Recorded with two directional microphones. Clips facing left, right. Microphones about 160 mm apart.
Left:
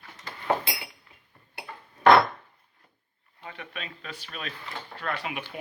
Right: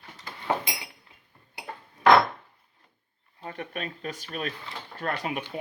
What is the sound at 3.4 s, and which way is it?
Speech, 45° right (ahead or behind).